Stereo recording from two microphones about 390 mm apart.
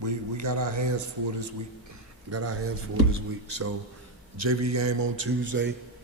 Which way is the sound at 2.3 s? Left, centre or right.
Right.